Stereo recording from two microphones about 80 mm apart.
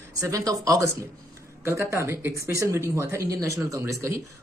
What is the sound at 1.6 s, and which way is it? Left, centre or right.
Speech, right.